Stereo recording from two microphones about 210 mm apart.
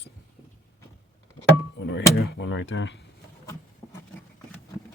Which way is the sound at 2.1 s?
50° left (ahead or behind).